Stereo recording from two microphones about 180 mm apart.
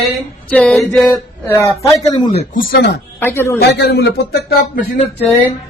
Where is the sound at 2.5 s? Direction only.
60° left (ahead or behind).